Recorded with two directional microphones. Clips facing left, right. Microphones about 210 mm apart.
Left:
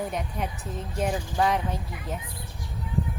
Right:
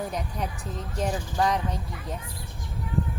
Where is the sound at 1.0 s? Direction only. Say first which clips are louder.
Left 1 dB; 5° left (ahead or behind).